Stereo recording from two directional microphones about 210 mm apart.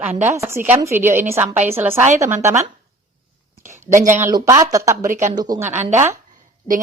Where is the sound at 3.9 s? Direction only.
35° right (ahead or behind).